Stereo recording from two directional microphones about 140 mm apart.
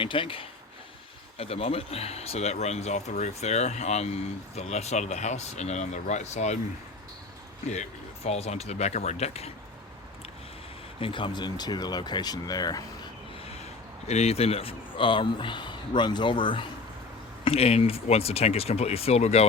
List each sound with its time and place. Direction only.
0.0 s speech: 40° left (ahead or behind); by 6.6 s 55° left (ahead or behind)
7.7 s speech: 50° left (ahead or behind)
11.0 s speech: 35° left (ahead or behind)
14.1 s speech: 50° left (ahead or behind)